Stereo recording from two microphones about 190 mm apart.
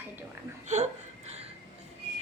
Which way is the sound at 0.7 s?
35° right (ahead or behind).